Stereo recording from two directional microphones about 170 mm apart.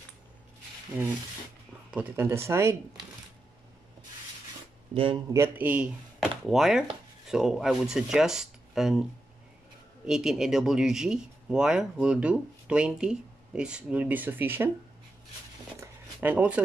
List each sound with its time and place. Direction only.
1.9 s speech: 10° right (ahead or behind)
4.9 s speech: 30° right (ahead or behind)
5.3 s speech: 10° right (ahead or behind)
10.0 s speech: 5° right (ahead or behind)
15.8 s a sound: 10° right (ahead or behind)